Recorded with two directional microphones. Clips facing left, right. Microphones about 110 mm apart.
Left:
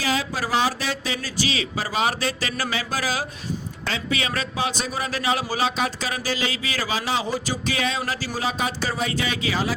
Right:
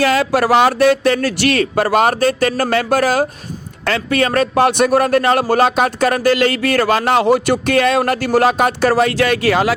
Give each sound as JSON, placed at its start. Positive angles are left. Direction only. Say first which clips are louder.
{"t": 0.0, "sound": "a man's voice", "louder": "right 11 dB", "side_deg": -65}